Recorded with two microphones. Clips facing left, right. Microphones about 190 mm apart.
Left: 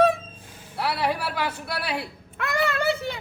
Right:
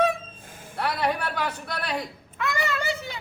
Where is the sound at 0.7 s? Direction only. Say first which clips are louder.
Even; 5° left (ahead or behind).